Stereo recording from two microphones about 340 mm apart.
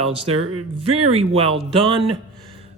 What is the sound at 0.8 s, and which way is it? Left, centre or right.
Speech, centre.